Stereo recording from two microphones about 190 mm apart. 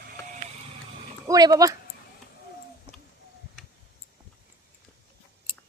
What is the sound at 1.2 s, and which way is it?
Speech, 20° right (ahead or behind).